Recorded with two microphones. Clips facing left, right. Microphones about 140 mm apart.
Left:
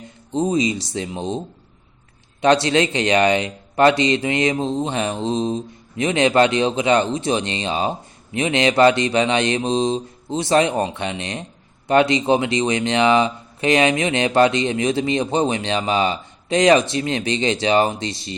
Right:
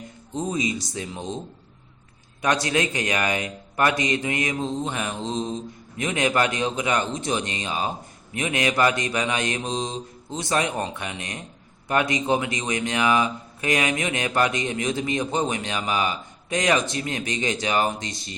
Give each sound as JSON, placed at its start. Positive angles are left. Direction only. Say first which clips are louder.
{"t": 0.3, "sound": "a man's voice", "louder": "left 7 dB", "side_deg": 20}
{"t": 2.4, "sound": "a man's voice", "louder": "left 7 dB", "side_deg": 25}